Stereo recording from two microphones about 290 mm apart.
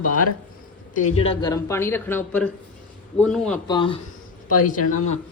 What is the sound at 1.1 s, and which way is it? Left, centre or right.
A man's voice, centre.